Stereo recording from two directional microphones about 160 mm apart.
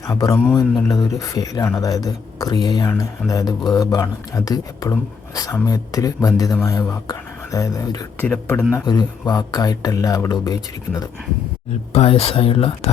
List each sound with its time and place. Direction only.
0.1 s a man's voice: 20° left (ahead or behind)
8.8 s speech: 25° left (ahead or behind)
11.9 s speech: 40° left (ahead or behind)